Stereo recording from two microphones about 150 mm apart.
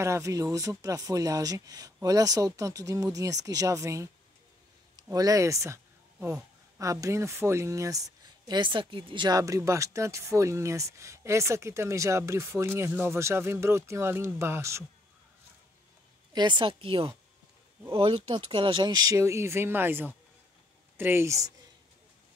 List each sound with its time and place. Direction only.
0.0 s speech: 20° right (ahead or behind)
6.1 s speech: 10° right (ahead or behind)
6.8 s speech: 20° right (ahead or behind)
16.3 s a woman's voice: 30° right (ahead or behind)